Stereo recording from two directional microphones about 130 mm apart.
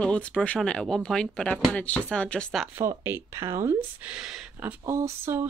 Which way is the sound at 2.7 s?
20° right (ahead or behind).